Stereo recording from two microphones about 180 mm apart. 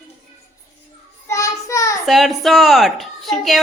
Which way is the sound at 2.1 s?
Centre (ahead or behind).